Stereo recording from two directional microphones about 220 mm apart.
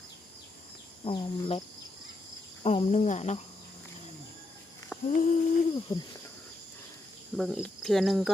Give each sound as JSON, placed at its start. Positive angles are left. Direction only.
{"t": 1.0, "sound": "speech", "side_deg": 25}
{"t": 2.6, "sound": "cricket", "side_deg": 30}
{"t": 5.0, "sound": "cricket", "side_deg": 35}
{"t": 7.3, "sound": "speech", "side_deg": 0}